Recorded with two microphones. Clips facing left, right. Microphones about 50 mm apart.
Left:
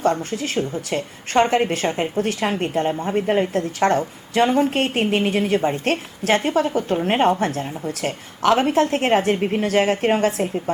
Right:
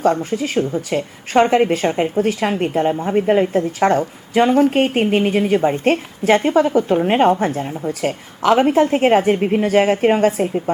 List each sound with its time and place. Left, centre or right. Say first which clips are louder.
0.0 s a woman's voice: right 4 dB; centre